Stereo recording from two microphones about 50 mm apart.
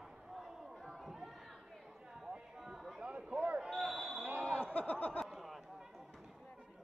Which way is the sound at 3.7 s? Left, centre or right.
Centre.